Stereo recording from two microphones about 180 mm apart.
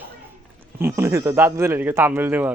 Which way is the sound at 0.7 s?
15° right (ahead or behind).